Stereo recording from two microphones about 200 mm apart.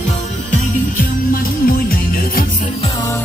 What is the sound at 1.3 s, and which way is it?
Music, 45° left (ahead or behind).